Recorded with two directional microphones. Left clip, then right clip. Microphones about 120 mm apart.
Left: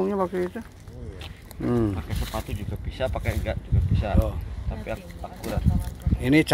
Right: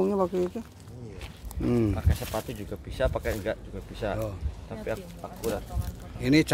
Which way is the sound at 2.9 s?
90° right.